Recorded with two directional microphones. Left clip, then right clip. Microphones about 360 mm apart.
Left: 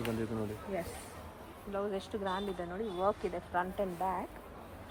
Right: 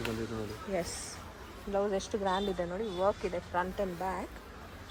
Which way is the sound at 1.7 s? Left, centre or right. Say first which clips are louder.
Right 5 dB; centre.